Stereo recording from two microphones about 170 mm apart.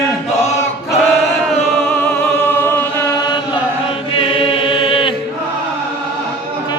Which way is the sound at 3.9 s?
30° left (ahead or behind).